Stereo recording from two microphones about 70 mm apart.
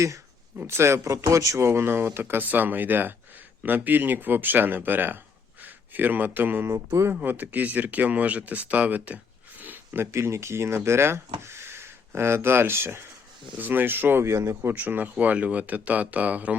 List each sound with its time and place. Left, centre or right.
0.7 s speech: right
6.7 s speech: right
7.1 s speech: right
14.3 s speech: right
14.8 s speech: right